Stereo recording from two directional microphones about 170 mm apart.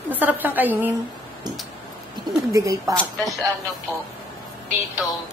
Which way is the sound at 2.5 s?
20° right (ahead or behind).